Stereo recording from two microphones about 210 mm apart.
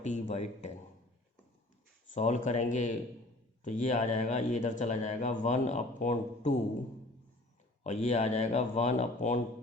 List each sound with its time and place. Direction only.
0.0 s speech: 35° left (ahead or behind)
2.0 s speech: 35° left (ahead or behind)
7.9 s speech: 30° left (ahead or behind)